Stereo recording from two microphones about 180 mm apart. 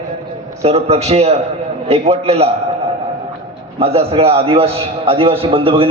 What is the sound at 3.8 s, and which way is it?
A man's voice, 35° right (ahead or behind).